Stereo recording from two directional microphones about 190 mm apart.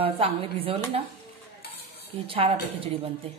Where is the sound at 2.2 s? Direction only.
30° right (ahead or behind).